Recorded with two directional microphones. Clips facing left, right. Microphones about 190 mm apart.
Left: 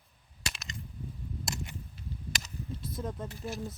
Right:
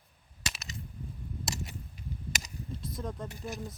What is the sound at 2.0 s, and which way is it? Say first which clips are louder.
Chop: right 4 dB; 15° right (ahead or behind).